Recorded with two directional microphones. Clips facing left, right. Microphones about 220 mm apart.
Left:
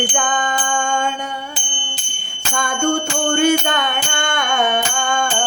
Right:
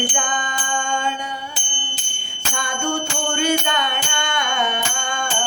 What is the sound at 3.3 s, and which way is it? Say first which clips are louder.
Music: left 5 dB; 50° left (ahead or behind).